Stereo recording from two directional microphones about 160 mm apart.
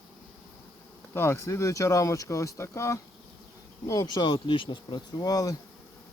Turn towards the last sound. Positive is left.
turn(degrees=25)  # may be behind; listen again after turning